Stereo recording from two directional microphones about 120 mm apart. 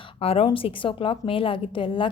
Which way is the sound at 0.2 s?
55° left (ahead or behind).